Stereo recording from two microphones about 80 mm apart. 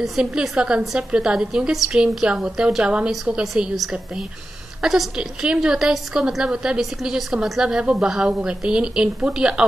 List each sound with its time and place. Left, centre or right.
0.0 s a woman's voice: centre